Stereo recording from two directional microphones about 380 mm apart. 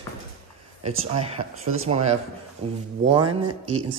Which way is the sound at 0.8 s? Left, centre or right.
Centre.